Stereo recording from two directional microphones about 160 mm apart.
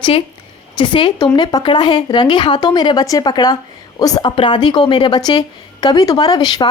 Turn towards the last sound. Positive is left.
turn(degrees=25)  # may be behind; listen again after turning